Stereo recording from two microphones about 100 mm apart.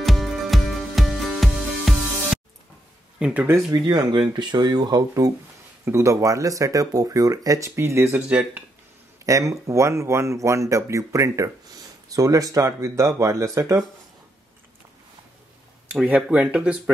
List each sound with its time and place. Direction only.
0.0 s music: centre (ahead or behind)
3.2 s speech: 10° right (ahead or behind)
3.4 s speech: 25° right (ahead or behind)
3.8 s speech: 40° right (ahead or behind)
5.9 s speech: 30° right (ahead or behind)
8.3 s speech: 10° right (ahead or behind)
9.2 s speech: 30° right (ahead or behind)
15.9 s speech: 10° right (ahead or behind)